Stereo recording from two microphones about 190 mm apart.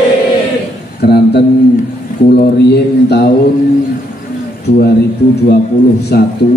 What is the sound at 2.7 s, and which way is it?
Speech, 60° left (ahead or behind).